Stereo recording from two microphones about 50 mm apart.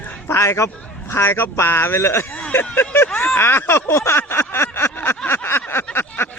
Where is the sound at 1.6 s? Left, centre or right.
Left.